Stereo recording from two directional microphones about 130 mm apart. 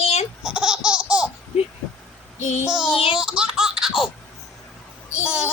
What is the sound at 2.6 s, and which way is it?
Child singing, 5° right (ahead or behind).